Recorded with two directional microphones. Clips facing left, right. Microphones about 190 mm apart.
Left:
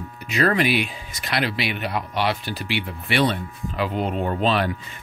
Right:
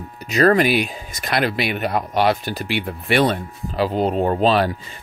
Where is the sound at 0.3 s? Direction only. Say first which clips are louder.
Right 5 dB; 40° right (ahead or behind).